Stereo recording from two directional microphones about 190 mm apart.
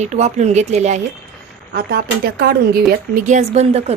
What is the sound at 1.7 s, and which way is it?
Speech, 55° right (ahead or behind).